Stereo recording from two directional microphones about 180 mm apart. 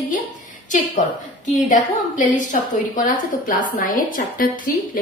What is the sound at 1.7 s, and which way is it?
A woman's voice, 45° left (ahead or behind).